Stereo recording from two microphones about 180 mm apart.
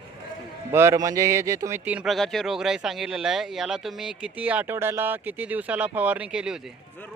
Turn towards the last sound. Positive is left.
turn(degrees=-5)  # may be behind; listen again after turning